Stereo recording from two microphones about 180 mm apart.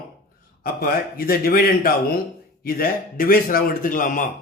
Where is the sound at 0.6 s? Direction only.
55° left (ahead or behind).